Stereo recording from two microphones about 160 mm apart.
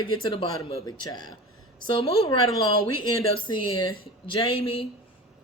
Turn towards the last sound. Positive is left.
turn(degrees=35)  # may be behind; listen again after turning